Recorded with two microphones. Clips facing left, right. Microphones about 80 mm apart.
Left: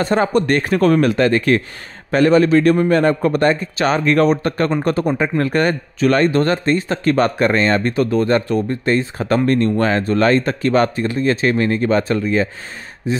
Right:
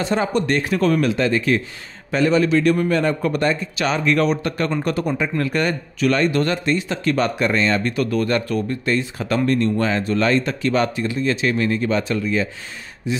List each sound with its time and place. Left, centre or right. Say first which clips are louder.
0.0 s speech: left 4 dB; left